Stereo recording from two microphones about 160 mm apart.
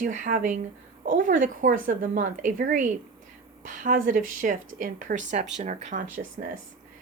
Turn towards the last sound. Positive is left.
turn(degrees=-55)  # may be behind; listen again after turning